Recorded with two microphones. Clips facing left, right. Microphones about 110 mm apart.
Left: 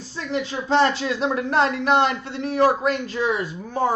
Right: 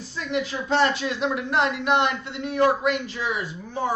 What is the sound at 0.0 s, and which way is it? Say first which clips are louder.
Speech: even; 35° left (ahead or behind).